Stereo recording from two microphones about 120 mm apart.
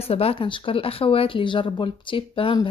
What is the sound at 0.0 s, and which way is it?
Speech, 55° left (ahead or behind).